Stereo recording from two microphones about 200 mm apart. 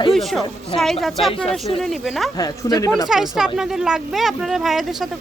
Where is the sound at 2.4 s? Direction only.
20° left (ahead or behind).